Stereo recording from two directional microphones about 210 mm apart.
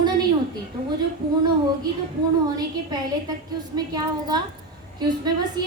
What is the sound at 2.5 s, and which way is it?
A woman's voice, 20° right (ahead or behind).